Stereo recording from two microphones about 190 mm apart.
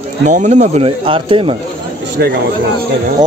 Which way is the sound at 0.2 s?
40° right (ahead or behind).